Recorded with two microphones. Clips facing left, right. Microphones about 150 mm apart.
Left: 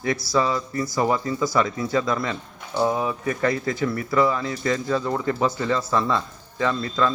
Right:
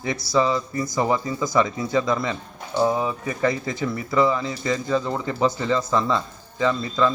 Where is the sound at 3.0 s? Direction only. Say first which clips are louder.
Even; 20° right (ahead or behind).